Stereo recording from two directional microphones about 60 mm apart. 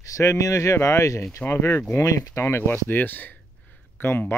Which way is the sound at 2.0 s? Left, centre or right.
Left.